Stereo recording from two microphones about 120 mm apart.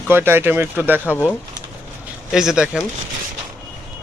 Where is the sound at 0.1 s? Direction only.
20° right (ahead or behind).